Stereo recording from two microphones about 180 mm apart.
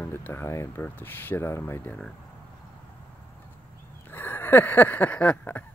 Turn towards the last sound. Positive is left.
turn(degrees=10)  # may be behind; listen again after turning